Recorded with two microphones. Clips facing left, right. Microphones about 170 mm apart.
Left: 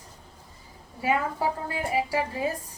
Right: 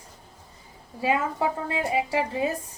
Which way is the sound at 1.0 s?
25° right (ahead or behind).